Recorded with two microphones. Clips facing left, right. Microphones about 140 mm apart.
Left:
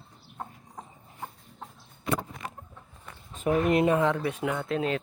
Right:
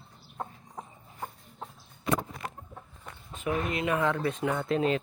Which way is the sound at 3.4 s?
50° left (ahead or behind).